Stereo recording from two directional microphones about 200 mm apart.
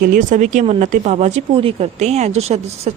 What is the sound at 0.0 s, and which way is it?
Speech, 40° right (ahead or behind).